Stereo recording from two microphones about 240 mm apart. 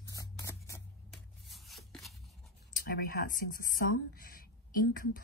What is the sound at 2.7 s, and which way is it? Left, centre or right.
Speech, left.